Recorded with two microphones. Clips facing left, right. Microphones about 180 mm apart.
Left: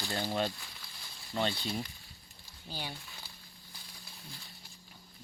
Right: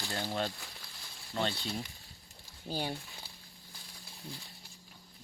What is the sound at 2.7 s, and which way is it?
Speech, 45° right (ahead or behind).